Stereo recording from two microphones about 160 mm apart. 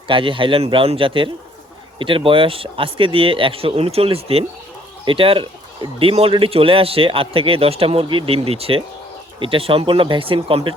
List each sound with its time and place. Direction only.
0.1 s speech: 30° right (ahead or behind)